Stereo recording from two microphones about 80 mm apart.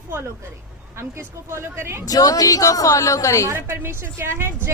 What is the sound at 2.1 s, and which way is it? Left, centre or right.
A woman's voice, left.